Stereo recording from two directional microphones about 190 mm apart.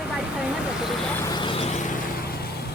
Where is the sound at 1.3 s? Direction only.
25° left (ahead or behind).